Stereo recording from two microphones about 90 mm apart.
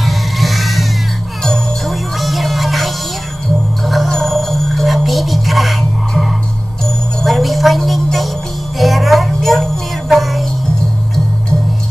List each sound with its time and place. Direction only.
0.0 s music: centre (ahead or behind)